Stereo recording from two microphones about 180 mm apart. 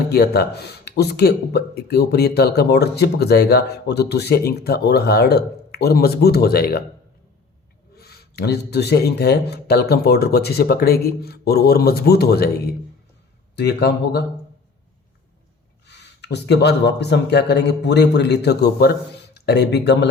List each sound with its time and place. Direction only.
0.1 s speech: 60° left (ahead or behind)
7.9 s speech: 60° left (ahead or behind)
13.6 s speech: 70° left (ahead or behind)
15.9 s speech: 70° left (ahead or behind)